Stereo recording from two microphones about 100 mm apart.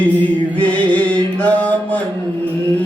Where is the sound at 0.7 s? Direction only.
15° left (ahead or behind).